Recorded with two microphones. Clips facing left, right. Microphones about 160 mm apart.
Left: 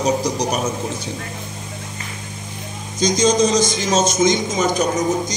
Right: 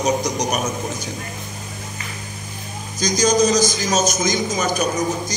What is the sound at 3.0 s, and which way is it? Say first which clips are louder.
A man's voice: left 1 dB; 25° left (ahead or behind).